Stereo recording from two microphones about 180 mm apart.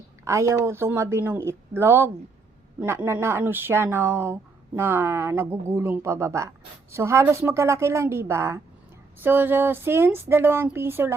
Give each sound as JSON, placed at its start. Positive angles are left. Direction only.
{"t": 0.3, "sound": "speech", "side_deg": -15}